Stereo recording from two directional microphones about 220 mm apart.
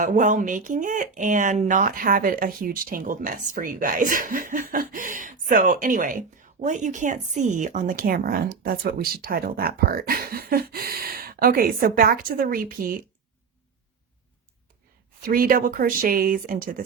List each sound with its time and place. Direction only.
0.0 s speech: 35° right (ahead or behind)
15.2 s speech: 40° right (ahead or behind)